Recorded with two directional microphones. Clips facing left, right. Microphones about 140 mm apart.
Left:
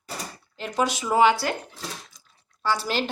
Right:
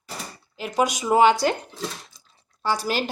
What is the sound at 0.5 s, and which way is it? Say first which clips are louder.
Speech: right 2 dB; 10° right (ahead or behind).